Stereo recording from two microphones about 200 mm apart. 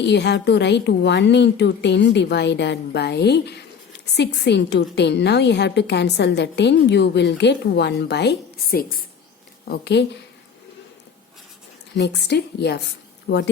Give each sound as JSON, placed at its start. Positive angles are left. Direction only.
{"t": 0.0, "sound": "a woman's voice", "side_deg": 60}
{"t": 11.9, "sound": "a woman's voice", "side_deg": 55}